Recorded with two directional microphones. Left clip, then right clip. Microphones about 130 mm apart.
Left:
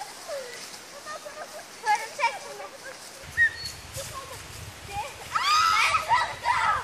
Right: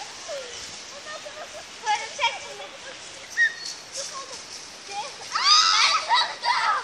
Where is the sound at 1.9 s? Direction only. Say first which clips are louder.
Even; 10° right (ahead or behind).